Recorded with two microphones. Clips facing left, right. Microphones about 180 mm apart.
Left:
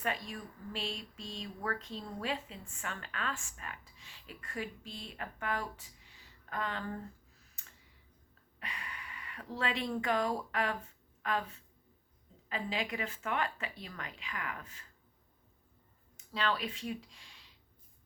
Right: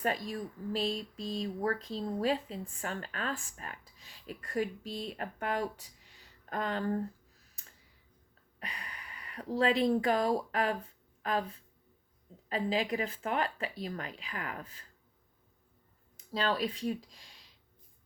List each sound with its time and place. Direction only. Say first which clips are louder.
0.0 s speech: right 5 dB; 40° right (ahead or behind)
8.5 s speech: right 1 dB; 35° right (ahead or behind)
16.3 s speech: right 3 dB; 40° right (ahead or behind)